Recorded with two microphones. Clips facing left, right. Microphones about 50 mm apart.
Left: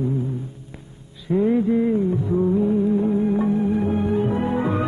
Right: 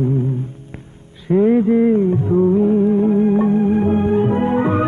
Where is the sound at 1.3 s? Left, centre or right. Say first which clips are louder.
Right 5 dB; right.